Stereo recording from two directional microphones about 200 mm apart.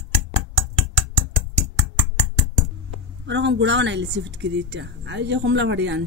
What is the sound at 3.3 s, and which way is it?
Speech, 60° right (ahead or behind).